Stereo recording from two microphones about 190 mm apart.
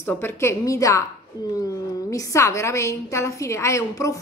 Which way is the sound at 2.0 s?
15° left (ahead or behind).